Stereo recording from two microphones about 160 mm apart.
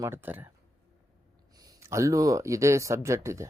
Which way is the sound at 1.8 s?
20° right (ahead or behind).